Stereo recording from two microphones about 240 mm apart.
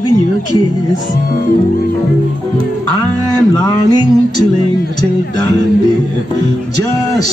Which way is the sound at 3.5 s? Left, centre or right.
Centre.